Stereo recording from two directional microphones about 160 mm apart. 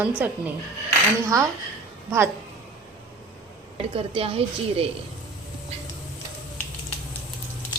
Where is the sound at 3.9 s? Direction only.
35° right (ahead or behind).